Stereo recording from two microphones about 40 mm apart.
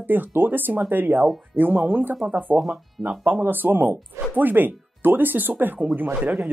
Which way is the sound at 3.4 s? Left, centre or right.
Right.